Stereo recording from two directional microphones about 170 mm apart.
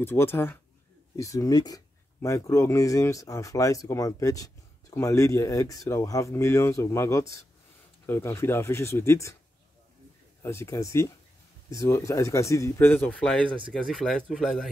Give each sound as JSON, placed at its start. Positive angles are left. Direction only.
{"t": 0.0, "sound": "speech", "side_deg": 15}
{"t": 10.4, "sound": "speech", "side_deg": 15}